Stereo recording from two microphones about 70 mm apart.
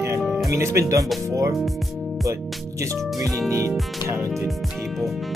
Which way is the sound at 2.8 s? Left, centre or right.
Right.